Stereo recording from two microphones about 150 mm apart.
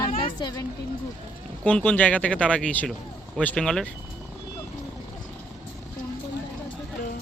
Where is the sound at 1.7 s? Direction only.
10° left (ahead or behind).